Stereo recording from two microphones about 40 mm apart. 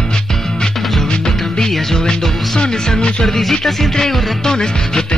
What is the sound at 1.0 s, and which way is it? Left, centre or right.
Music, centre.